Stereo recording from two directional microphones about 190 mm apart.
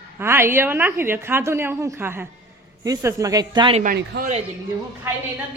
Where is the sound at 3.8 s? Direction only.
45° right (ahead or behind).